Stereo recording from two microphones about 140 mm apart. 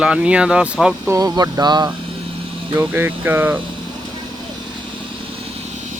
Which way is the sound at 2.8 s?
15° right (ahead or behind).